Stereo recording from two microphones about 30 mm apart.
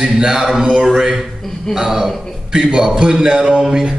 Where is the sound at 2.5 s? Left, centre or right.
Right.